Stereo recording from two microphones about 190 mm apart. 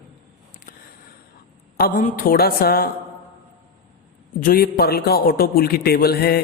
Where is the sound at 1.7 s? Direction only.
45° left (ahead or behind).